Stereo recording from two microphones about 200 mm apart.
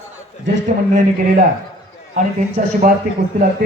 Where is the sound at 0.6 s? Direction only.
40° right (ahead or behind).